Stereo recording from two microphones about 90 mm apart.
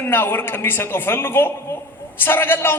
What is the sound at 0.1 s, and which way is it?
A man's voice, 25° left (ahead or behind).